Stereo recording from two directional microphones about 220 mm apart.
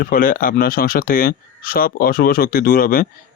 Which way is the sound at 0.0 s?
40° left (ahead or behind).